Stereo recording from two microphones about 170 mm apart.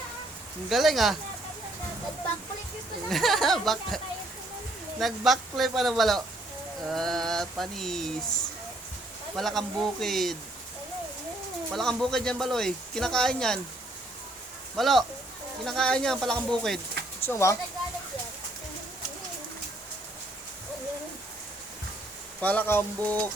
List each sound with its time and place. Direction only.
0.7 s speech: centre (ahead or behind)
3.1 s speech: centre (ahead or behind)
9.3 s speech: centre (ahead or behind)
11.7 s speech: centre (ahead or behind)
14.8 s speech: centre (ahead or behind)
17.2 s speech: 15° left (ahead or behind)
22.4 s speech: 10° left (ahead or behind)